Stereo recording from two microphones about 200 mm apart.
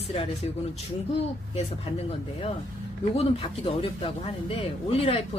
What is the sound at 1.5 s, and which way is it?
Speech, 30° left (ahead or behind).